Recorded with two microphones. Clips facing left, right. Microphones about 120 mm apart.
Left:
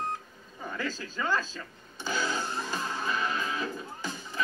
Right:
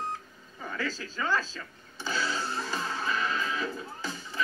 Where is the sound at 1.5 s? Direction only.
15° left (ahead or behind).